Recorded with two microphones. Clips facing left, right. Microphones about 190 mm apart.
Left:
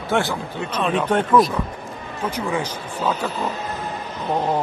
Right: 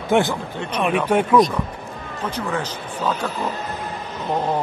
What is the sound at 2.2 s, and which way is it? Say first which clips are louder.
Speech: left 1 dB; 10° left (ahead or behind).